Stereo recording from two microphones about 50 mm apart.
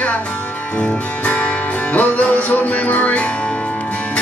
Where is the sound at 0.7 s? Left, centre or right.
Left.